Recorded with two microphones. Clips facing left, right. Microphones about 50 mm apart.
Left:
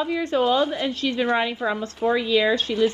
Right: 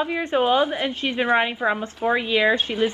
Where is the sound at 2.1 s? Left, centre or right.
Right.